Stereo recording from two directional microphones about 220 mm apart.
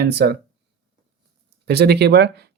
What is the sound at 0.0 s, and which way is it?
Speech, 45° right (ahead or behind).